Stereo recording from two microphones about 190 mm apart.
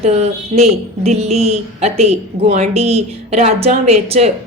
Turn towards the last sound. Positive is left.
turn(degrees=-35)  # may be behind; listen again after turning